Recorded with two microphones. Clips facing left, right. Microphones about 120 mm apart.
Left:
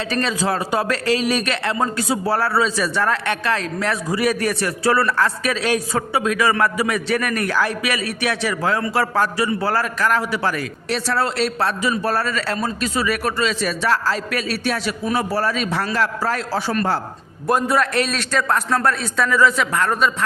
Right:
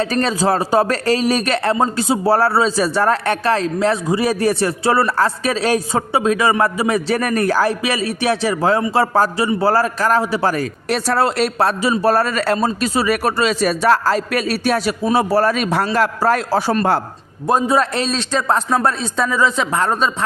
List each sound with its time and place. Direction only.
0.0 s a man's voice: 40° right (ahead or behind)
1.7 s a man's voice: 25° right (ahead or behind); by 12.5 s 50° right (ahead or behind)
12.5 s a man's voice: 35° right (ahead or behind)
17.5 s a man's voice: 25° right (ahead or behind)